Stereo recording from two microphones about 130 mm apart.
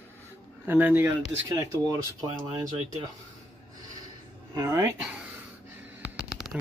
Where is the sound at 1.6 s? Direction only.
25° right (ahead or behind).